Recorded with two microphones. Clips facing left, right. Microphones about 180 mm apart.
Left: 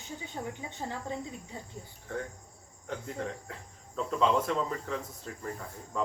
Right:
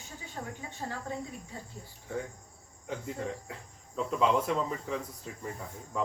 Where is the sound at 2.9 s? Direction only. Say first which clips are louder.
Right 1 dB; 5° right (ahead or behind).